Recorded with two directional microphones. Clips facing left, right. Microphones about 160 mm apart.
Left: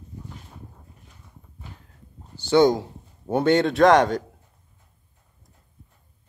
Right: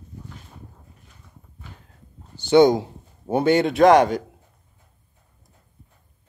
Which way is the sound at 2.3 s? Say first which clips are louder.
Right 3 dB; 15° right (ahead or behind).